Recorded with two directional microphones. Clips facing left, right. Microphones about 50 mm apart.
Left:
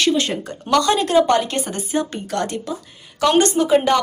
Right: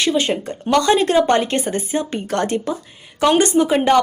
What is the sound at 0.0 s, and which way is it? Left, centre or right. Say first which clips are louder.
A woman's voice: right 1 dB; right.